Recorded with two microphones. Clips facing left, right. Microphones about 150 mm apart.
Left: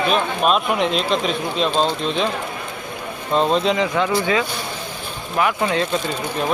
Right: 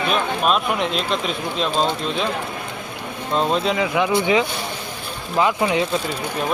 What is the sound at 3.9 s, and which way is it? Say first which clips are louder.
Speech: right 1 dB; 15° right (ahead or behind).